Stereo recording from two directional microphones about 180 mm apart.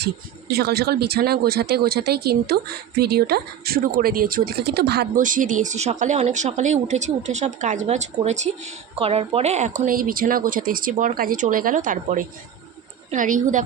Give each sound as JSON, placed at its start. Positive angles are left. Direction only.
{"t": 0.0, "sound": "speech", "side_deg": -60}